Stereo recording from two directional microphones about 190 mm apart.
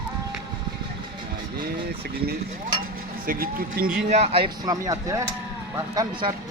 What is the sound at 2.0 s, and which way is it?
Vehicle, 55° right (ahead or behind).